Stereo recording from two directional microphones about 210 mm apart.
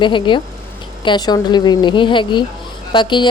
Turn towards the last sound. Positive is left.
turn(degrees=20)  # may be behind; listen again after turning